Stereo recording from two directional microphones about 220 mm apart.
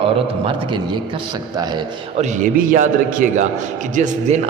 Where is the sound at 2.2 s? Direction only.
40° right (ahead or behind).